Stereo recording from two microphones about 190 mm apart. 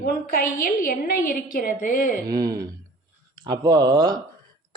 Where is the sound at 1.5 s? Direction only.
50° left (ahead or behind).